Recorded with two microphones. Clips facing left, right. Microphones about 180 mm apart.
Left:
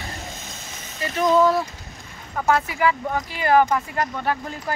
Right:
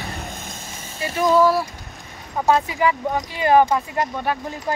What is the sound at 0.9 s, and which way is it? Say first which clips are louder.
A woman's voice: right 1 dB; 10° right (ahead or behind).